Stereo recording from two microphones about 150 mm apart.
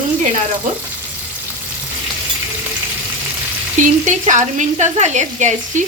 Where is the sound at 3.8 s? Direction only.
55° right (ahead or behind).